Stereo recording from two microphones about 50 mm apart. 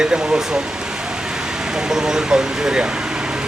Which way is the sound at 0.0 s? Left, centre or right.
Centre.